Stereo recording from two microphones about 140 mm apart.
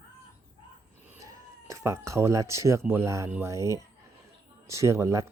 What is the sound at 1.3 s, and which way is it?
Speech, 20° right (ahead or behind).